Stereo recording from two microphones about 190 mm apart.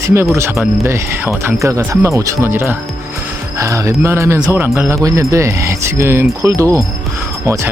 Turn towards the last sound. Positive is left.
turn(degrees=-15)  # may be behind; listen again after turning